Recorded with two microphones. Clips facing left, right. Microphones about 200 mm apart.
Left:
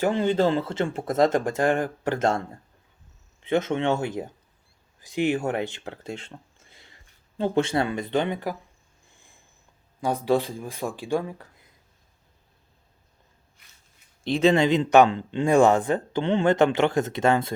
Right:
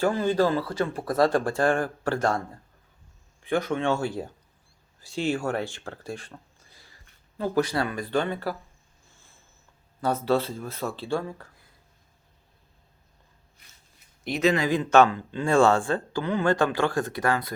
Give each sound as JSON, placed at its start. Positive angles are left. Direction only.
{"t": 0.0, "sound": "speech", "side_deg": 25}
{"t": 3.4, "sound": "speech", "side_deg": 20}
{"t": 9.1, "sound": "a sound", "side_deg": 15}
{"t": 10.0, "sound": "speech", "side_deg": 15}
{"t": 14.3, "sound": "speech", "side_deg": 30}